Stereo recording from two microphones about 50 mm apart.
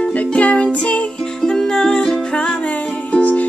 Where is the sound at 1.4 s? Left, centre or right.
Centre; by 3.4 s left.